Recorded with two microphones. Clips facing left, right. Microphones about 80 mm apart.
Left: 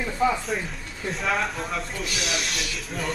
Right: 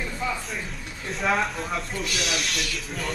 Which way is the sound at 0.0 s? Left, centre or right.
Left.